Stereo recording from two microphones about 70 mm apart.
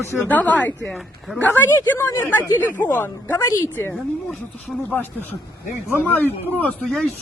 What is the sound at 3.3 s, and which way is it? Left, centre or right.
Speech, left.